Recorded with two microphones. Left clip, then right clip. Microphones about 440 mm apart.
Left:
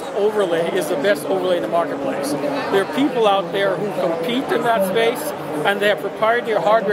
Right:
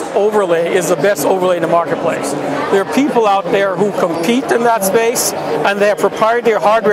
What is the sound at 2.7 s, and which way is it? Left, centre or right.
Speech, right.